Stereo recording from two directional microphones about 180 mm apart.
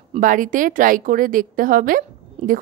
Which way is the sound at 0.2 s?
50° right (ahead or behind).